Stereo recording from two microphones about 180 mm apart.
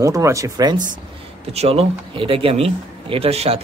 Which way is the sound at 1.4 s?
35° right (ahead or behind).